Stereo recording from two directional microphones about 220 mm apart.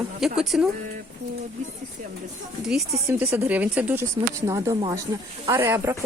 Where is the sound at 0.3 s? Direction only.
Centre (ahead or behind).